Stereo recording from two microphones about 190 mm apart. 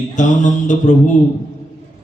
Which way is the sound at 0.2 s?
40° left (ahead or behind).